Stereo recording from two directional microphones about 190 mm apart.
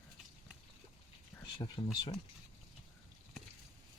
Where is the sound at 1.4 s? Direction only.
25° left (ahead or behind).